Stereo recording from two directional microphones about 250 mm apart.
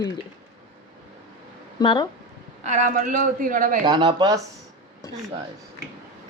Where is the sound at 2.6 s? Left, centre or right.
Right.